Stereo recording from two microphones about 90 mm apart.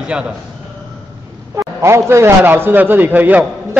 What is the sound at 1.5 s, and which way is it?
A man's voice, 35° right (ahead or behind).